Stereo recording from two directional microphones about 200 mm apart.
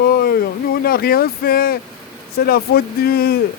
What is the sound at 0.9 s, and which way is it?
Speech, 50° left (ahead or behind).